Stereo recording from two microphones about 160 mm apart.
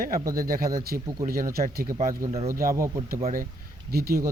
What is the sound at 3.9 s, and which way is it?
Speech, 75° right (ahead or behind).